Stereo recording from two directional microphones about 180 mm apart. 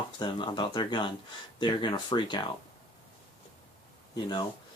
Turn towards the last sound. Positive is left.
turn(degrees=25)  # may be behind; listen again after turning